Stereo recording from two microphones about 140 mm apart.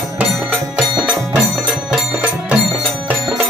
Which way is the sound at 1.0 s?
5° right (ahead or behind).